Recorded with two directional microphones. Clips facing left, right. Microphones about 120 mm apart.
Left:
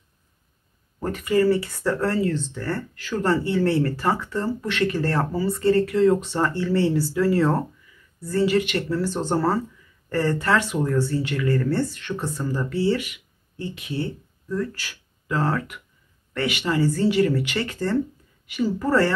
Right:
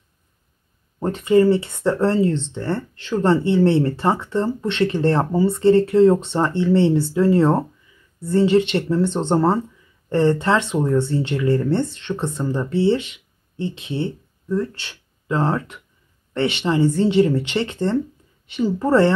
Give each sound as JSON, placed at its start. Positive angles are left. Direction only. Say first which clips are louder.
{"t": 0.9, "sound": "speech", "louder": "right 6 dB", "side_deg": -25}